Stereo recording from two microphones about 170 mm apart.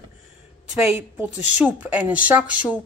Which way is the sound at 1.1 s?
10° right (ahead or behind).